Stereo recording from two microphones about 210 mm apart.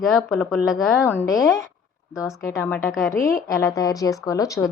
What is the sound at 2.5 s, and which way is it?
A woman's voice, 10° left (ahead or behind).